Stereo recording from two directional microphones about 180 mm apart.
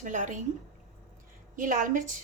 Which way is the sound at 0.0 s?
45° right (ahead or behind).